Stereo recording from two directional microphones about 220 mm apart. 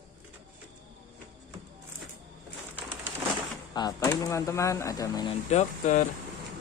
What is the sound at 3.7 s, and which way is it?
Speech, 15° left (ahead or behind).